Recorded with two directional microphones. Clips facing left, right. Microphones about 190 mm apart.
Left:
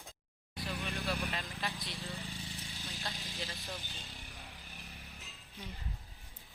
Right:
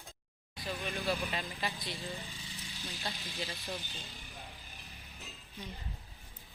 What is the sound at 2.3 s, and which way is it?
Vehicle, 60° left (ahead or behind).